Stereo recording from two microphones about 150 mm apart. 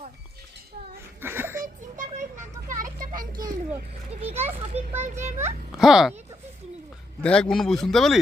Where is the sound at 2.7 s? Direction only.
65° right (ahead or behind).